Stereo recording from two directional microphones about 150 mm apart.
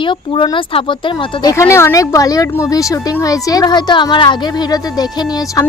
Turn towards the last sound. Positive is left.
turn(degrees=25)  # may be behind; listen again after turning